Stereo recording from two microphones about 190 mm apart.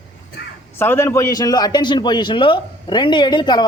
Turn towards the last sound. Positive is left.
turn(degrees=20)  # may be behind; listen again after turning